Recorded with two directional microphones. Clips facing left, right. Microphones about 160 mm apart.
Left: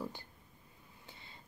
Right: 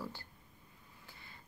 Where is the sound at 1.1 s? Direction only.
20° left (ahead or behind).